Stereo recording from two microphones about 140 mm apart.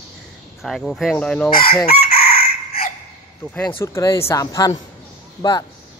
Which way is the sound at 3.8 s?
20° left (ahead or behind).